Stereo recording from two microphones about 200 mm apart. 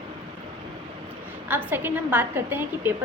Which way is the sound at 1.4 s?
10° right (ahead or behind).